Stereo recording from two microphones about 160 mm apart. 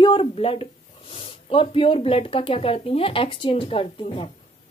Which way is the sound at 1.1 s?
35° left (ahead or behind).